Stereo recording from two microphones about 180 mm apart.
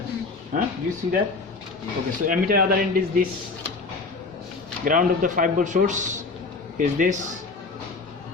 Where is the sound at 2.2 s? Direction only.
50° right (ahead or behind).